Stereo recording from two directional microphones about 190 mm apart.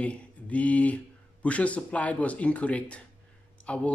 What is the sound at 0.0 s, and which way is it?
Speech, 5° left (ahead or behind).